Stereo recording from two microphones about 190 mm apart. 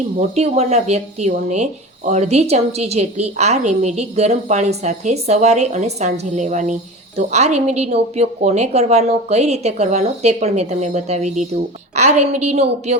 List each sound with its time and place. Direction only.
0.2 s speech: 35° right (ahead or behind)